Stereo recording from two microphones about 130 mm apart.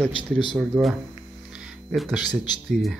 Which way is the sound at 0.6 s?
5° right (ahead or behind).